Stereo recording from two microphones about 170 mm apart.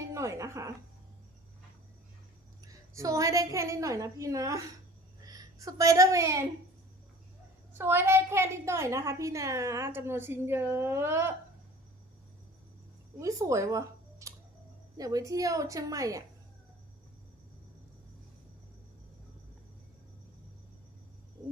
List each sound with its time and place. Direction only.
0.1 s speech: 20° right (ahead or behind)
2.6 s a woman's voice: 20° right (ahead or behind)
7.7 s a woman's voice: 15° right (ahead or behind)
13.1 s a woman's voice: 20° right (ahead or behind)